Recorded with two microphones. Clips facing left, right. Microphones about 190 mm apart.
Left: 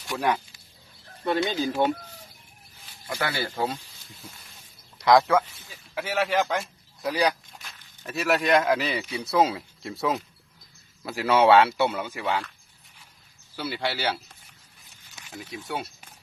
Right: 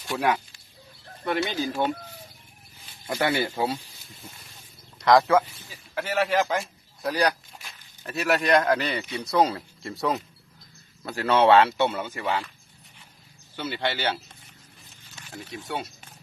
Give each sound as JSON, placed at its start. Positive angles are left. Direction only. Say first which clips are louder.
{"t": 0.1, "sound": "speech", "louder": "right 1 dB", "side_deg": -5}
{"t": 1.2, "sound": "speech", "louder": "left 2 dB", "side_deg": 25}
{"t": 3.1, "sound": "speech", "louder": "right 4 dB", "side_deg": -25}
{"t": 4.9, "sound": "speech", "louder": "right 1 dB", "side_deg": 0}
{"t": 13.6, "sound": "speech", "louder": "right 1 dB", "side_deg": 5}